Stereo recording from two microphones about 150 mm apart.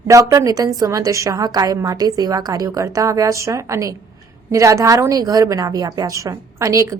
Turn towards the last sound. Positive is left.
turn(degrees=-20)  # may be behind; listen again after turning